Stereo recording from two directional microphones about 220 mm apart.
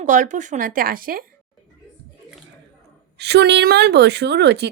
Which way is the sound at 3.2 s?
50° right (ahead or behind).